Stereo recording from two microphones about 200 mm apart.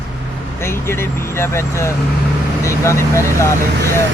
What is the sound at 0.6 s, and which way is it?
Speech, 15° left (ahead or behind).